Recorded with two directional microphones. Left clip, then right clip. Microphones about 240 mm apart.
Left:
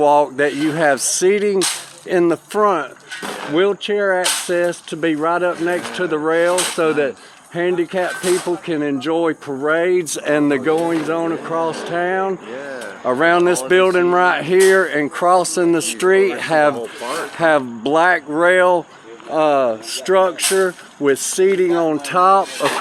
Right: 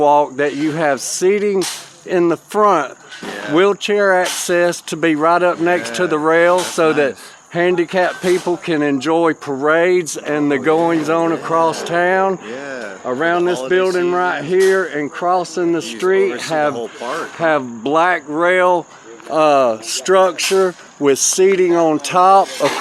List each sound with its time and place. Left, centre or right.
0.0 s speech: centre
10.2 s speech: centre
10.6 s speech: centre
13.1 s speech: centre